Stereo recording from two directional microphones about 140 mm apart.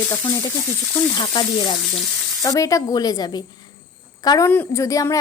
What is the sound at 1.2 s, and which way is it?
A woman's voice, 35° left (ahead or behind).